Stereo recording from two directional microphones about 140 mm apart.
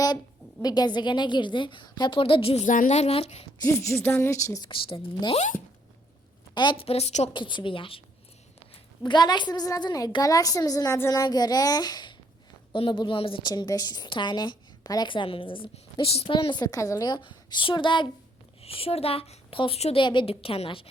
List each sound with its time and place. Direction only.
0.6 s a woman's voice: 30° left (ahead or behind)
2.6 s speech: 65° left (ahead or behind); by 3.5 s 45° left (ahead or behind)
3.6 s a woman's voice: 20° left (ahead or behind)
4.7 s a woman's voice: 40° left (ahead or behind)
6.5 s speech: 35° left (ahead or behind); by 7.3 s 50° left (ahead or behind)
7.3 s a woman's voice: 35° left (ahead or behind)